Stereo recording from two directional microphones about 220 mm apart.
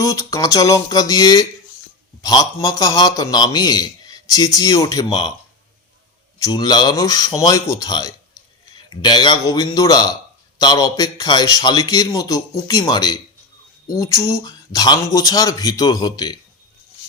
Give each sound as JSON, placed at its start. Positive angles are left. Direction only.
{"t": 0.0, "sound": "a man's voice", "side_deg": 15}
{"t": 6.5, "sound": "a man's voice", "side_deg": 20}